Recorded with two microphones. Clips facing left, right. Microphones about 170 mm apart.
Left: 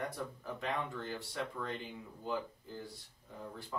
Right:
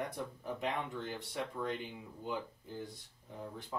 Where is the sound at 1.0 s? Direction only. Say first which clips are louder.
Even; 20° right (ahead or behind).